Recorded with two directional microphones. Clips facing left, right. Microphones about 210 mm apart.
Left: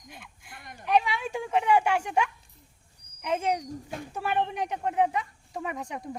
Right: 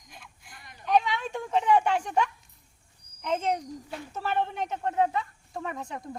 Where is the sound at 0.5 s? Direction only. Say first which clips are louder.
Left 6 dB; 50° left (ahead or behind).